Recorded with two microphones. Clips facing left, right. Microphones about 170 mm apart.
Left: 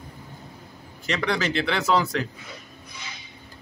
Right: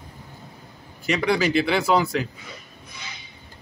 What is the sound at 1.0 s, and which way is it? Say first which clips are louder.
Speech: right 4 dB; 10° right (ahead or behind).